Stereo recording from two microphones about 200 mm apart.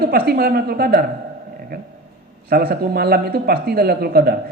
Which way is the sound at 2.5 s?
50° right (ahead or behind).